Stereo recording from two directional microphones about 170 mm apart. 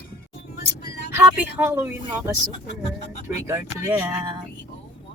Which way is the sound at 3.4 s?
15° right (ahead or behind).